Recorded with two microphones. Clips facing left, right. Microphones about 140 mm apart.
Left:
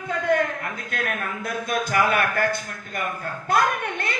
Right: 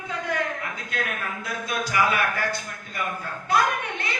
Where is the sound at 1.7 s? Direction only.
50° left (ahead or behind).